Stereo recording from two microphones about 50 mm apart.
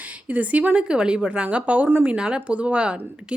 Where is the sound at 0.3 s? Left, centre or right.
Right.